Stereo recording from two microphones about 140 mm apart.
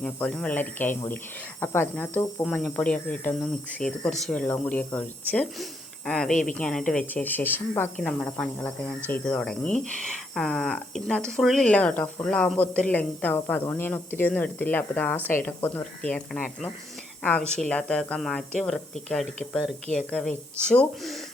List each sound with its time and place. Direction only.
0.0 s speech: 5° left (ahead or behind)